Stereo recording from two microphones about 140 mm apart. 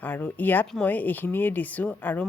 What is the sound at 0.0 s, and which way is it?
Speech, 15° left (ahead or behind).